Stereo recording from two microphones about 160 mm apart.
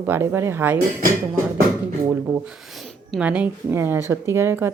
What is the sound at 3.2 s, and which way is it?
Speech, 10° right (ahead or behind).